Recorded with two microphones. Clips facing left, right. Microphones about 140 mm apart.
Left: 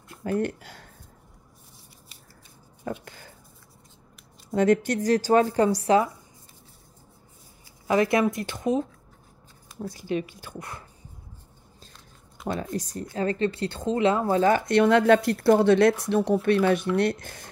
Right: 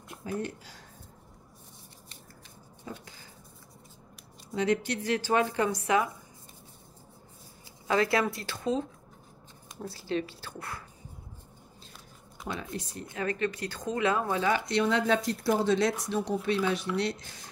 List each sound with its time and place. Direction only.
0.2 s speech: 60° left (ahead or behind)
2.8 s a sound: 60° left (ahead or behind)
4.5 s speech: 50° left (ahead or behind)
7.9 s speech: 20° left (ahead or behind)
12.4 s speech: 40° left (ahead or behind)